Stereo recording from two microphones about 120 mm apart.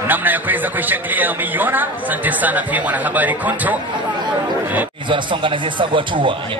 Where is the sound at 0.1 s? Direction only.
15° right (ahead or behind).